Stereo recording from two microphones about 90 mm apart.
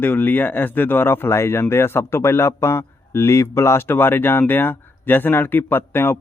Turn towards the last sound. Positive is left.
turn(degrees=25)  # may be behind; listen again after turning